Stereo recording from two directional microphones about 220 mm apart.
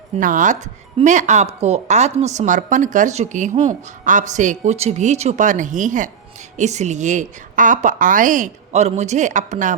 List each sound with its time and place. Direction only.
0.2 s speech: 35° right (ahead or behind)